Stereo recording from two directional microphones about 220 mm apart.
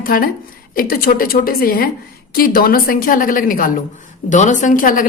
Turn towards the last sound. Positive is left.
turn(degrees=40)  # may be behind; listen again after turning